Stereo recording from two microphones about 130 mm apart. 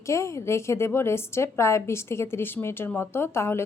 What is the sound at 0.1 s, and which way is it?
A woman's voice, 20° left (ahead or behind).